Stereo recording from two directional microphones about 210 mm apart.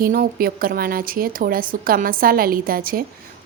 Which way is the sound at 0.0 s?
40° right (ahead or behind).